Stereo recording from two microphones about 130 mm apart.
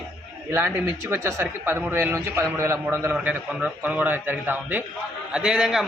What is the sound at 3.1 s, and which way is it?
A man's voice, 10° right (ahead or behind).